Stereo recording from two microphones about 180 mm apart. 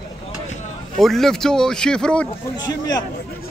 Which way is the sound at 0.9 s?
Centre (ahead or behind).